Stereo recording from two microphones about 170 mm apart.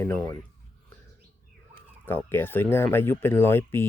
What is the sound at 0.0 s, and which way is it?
Speech, 15° left (ahead or behind).